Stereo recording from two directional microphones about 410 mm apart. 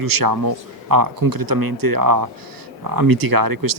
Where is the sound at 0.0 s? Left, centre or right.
Right.